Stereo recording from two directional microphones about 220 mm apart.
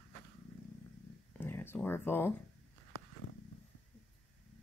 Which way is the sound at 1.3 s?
10° left (ahead or behind).